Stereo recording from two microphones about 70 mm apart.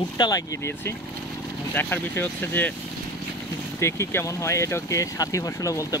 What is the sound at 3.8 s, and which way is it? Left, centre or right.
Speech, left.